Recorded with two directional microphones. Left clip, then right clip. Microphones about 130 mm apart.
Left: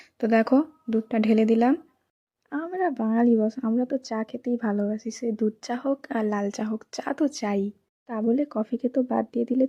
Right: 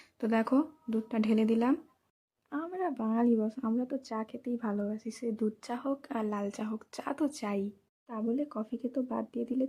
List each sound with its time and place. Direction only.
0.0 s speech: 35° left (ahead or behind)